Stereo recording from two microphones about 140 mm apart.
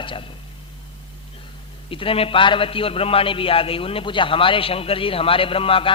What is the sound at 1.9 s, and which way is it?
Speech, 40° left (ahead or behind).